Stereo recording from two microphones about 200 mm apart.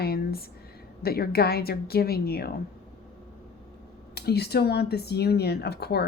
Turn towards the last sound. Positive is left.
turn(degrees=55)  # may be behind; listen again after turning